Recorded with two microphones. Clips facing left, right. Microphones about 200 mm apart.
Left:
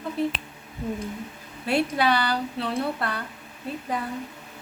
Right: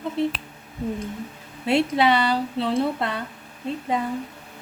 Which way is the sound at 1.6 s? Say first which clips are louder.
Right 3 dB; 25° right (ahead or behind).